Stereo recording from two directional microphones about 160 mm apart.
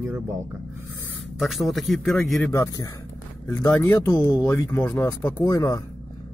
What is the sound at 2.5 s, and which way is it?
Speech, 20° left (ahead or behind).